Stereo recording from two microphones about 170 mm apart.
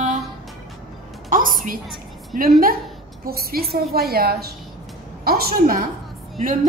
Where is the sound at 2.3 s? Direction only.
55° right (ahead or behind).